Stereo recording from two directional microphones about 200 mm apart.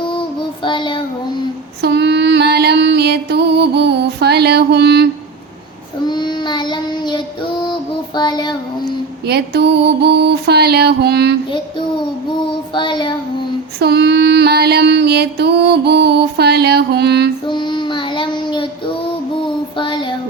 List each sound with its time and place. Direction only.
0.6 s child singing: 25° left (ahead or behind)
1.8 s music: 55° right (ahead or behind)
6.1 s child singing: 20° left (ahead or behind)
9.2 s music: 55° right (ahead or behind)
12.7 s child singing: 25° left (ahead or behind)
13.7 s music: 55° right (ahead or behind)
17.5 s child singing: 25° left (ahead or behind)
19.7 s child singing: 25° left (ahead or behind)